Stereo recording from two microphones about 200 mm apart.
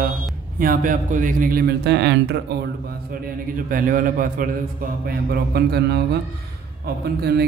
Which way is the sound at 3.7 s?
45° right (ahead or behind).